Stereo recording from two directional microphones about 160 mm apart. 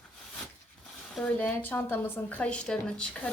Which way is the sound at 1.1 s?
10° left (ahead or behind).